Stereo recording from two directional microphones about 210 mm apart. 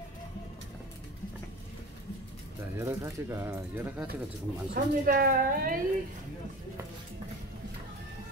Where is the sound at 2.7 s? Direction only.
15° right (ahead or behind).